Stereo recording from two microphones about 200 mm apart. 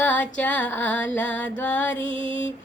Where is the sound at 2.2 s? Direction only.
25° right (ahead or behind).